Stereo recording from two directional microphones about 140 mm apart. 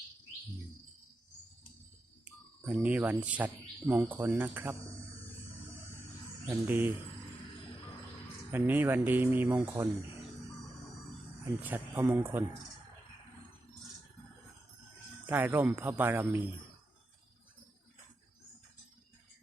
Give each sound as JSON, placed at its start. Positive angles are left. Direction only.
{"t": 2.2, "sound": "speech", "side_deg": -10}
{"t": 6.7, "sound": "speech", "side_deg": -15}
{"t": 8.5, "sound": "speech", "side_deg": -15}
{"t": 11.6, "sound": "speech", "side_deg": -15}
{"t": 15.3, "sound": "speech", "side_deg": -15}